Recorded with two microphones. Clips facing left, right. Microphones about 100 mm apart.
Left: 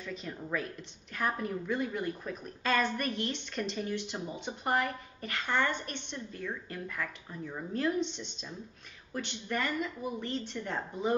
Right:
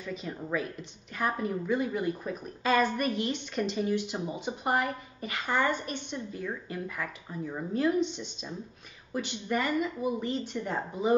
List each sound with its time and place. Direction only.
0.0 s speech: 5° right (ahead or behind)